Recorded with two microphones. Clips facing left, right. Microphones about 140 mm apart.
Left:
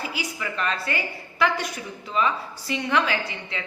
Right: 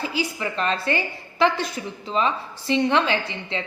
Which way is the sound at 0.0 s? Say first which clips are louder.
Right 5 dB; 30° right (ahead or behind).